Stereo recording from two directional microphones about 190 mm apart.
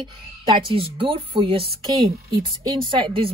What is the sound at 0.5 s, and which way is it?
A woman's voice, 30° right (ahead or behind).